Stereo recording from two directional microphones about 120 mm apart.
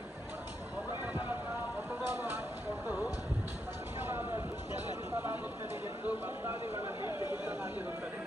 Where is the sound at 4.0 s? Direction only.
20° right (ahead or behind).